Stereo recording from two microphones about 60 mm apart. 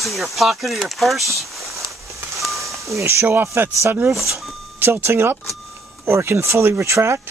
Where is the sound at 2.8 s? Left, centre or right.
Right.